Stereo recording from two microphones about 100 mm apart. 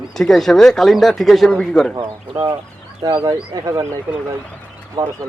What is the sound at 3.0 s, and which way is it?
Speech, 45° right (ahead or behind).